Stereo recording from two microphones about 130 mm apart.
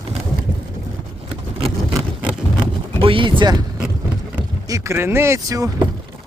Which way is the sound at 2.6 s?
40° right (ahead or behind).